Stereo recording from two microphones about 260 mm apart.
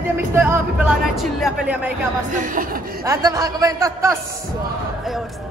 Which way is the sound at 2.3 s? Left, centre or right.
Right.